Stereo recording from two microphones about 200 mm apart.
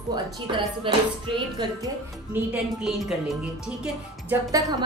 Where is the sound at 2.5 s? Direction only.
Centre (ahead or behind).